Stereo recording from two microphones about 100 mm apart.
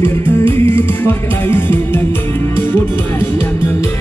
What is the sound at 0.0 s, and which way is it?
Music, 25° left (ahead or behind).